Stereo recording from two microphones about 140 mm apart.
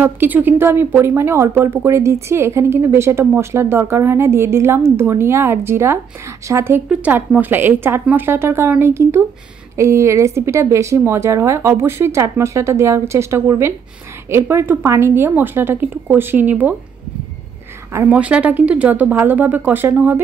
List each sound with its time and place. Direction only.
0.0 s speech: 15° right (ahead or behind)
17.9 s speech: 10° right (ahead or behind)